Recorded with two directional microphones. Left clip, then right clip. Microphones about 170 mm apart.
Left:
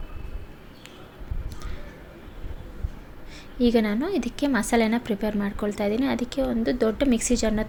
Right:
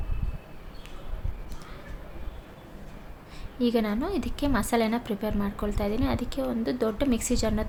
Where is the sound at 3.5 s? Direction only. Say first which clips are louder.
Left 4 dB; 15° left (ahead or behind).